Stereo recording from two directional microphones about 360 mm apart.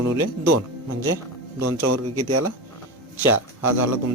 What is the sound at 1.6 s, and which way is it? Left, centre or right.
Speech, right.